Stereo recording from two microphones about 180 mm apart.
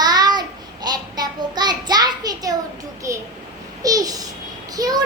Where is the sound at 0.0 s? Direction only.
20° right (ahead or behind).